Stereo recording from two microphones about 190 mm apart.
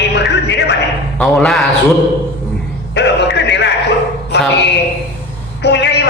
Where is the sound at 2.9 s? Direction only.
65° left (ahead or behind).